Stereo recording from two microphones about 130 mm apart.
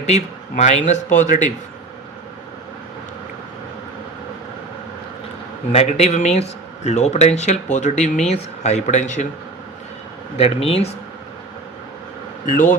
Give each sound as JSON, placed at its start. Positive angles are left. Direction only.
{"t": 0.0, "sound": "a man's voice", "side_deg": 60}
{"t": 5.7, "sound": "a man's voice", "side_deg": 55}
{"t": 10.3, "sound": "speech", "side_deg": 50}
{"t": 12.5, "sound": "speech", "side_deg": 75}